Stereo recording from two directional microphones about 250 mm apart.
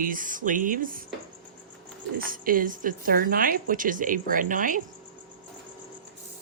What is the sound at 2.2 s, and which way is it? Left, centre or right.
A woman's voice, right.